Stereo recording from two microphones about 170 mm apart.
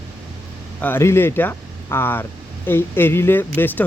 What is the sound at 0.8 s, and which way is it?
Speech, 15° left (ahead or behind).